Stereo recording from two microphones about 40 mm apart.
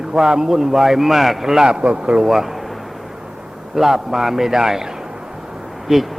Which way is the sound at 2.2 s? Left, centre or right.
Centre.